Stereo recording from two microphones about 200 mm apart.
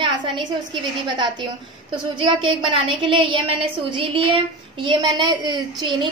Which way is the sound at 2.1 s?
25° right (ahead or behind).